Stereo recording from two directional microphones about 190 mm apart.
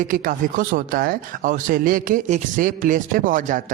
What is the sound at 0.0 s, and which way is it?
A man's voice, 45° right (ahead or behind).